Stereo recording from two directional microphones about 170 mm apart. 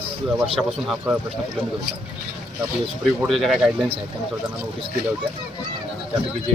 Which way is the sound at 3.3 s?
Centre (ahead or behind).